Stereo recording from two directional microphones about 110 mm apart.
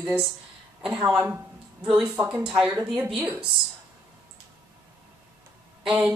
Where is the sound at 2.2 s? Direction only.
10° right (ahead or behind).